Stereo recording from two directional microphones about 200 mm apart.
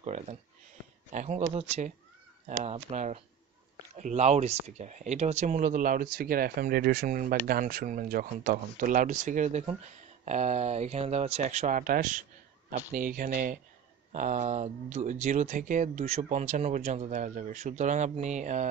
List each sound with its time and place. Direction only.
0.0 s speech: 35° right (ahead or behind)